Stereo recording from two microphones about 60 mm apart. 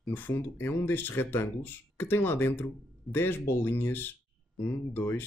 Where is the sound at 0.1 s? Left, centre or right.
Left.